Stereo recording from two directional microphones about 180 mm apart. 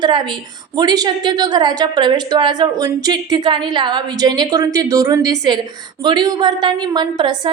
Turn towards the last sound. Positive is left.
turn(degrees=-25)  # may be behind; listen again after turning